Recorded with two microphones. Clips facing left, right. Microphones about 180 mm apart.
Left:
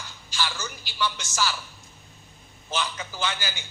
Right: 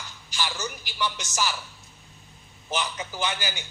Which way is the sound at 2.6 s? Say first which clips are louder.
Right 1 dB; 15° right (ahead or behind).